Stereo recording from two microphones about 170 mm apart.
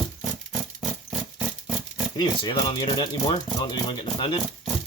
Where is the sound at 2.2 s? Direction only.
25° left (ahead or behind).